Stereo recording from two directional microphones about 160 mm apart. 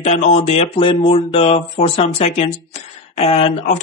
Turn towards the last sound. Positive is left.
turn(degrees=40)  # may be behind; listen again after turning